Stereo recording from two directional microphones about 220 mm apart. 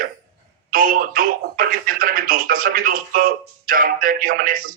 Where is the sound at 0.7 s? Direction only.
40° right (ahead or behind).